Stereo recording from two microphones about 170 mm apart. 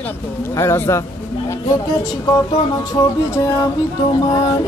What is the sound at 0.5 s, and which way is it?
Speech, 15° left (ahead or behind).